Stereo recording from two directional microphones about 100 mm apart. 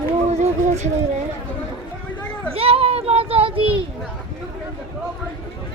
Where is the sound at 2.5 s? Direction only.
75° right (ahead or behind).